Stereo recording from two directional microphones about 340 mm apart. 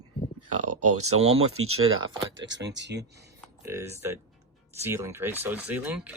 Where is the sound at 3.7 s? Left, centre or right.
Centre.